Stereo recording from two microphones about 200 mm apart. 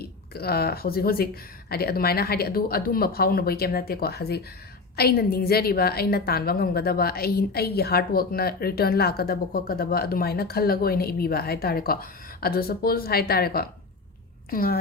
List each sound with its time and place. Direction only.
0.0 s a woman's voice: 50° left (ahead or behind)